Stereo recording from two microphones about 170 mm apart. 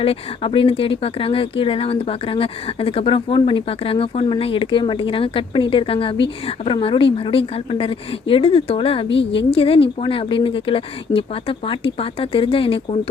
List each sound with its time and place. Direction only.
0.0 s speech: 30° left (ahead or behind)